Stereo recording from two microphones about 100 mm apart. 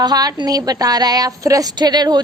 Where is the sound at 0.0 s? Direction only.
40° right (ahead or behind).